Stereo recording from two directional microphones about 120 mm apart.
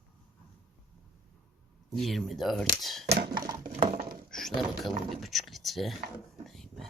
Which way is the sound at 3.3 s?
35° right (ahead or behind).